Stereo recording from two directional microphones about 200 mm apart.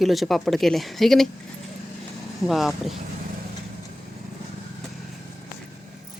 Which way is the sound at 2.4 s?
Centre (ahead or behind).